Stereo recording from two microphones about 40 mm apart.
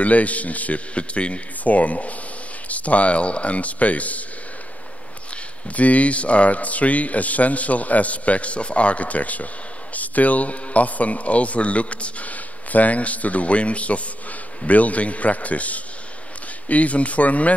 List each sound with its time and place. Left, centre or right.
0.0 s speech: left
5.3 s speech: left